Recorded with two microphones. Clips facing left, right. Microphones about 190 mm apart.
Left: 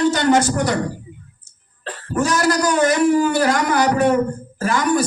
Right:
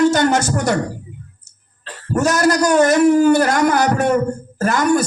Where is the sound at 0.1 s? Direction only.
45° right (ahead or behind).